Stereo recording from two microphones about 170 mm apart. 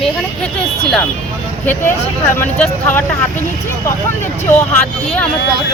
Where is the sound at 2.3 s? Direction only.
15° left (ahead or behind).